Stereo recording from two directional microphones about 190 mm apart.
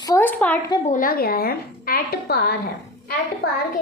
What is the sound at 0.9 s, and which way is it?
A woman's voice, 45° left (ahead or behind).